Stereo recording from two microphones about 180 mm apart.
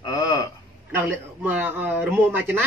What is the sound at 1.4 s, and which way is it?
Speech, 10° right (ahead or behind).